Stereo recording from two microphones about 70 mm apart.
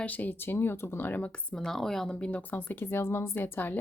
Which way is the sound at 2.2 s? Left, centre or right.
Left.